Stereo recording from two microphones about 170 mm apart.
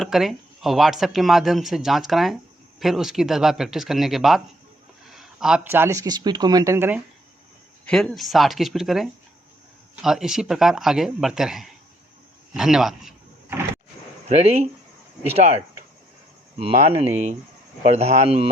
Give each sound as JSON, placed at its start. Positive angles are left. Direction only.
{"t": 0.0, "sound": "speech", "side_deg": 0}
{"t": 7.9, "sound": "speech", "side_deg": 0}
{"t": 14.3, "sound": "speech", "side_deg": -40}